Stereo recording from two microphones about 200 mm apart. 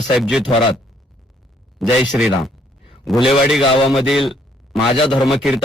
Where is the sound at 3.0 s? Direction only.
Centre (ahead or behind).